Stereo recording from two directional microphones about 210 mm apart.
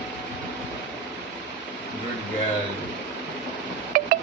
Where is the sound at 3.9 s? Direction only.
40° right (ahead or behind).